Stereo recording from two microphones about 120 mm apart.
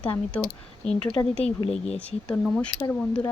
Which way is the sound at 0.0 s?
10° left (ahead or behind).